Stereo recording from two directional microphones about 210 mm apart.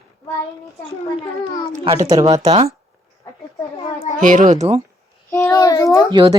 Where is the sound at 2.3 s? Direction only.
30° right (ahead or behind).